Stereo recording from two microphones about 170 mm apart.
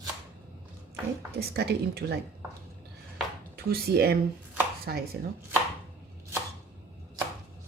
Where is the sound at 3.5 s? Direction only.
65° right (ahead or behind).